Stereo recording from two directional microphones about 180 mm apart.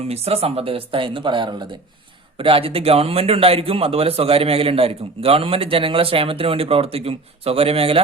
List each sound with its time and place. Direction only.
0.1 s speech: 35° right (ahead or behind)